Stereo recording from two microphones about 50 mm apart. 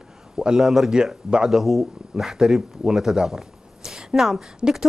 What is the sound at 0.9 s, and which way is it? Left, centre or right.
Speech, centre.